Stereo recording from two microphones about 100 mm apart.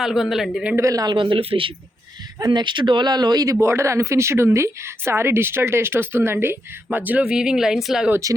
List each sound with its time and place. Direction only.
0.0 s a man's voice: 5° right (ahead or behind)
0.8 s speech: 35° right (ahead or behind)
1.1 s speech: 55° right (ahead or behind)
2.5 s speech: 50° right (ahead or behind); by 8.1 s 5° right (ahead or behind)